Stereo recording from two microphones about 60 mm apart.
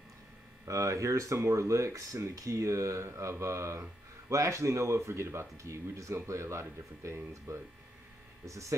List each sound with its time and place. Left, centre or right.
0.7 s speech: right
8.5 s speech: right